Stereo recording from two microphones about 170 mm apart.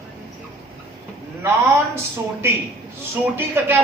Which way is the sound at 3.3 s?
15° right (ahead or behind).